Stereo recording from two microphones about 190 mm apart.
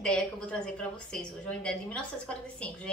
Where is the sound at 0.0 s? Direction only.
5° left (ahead or behind).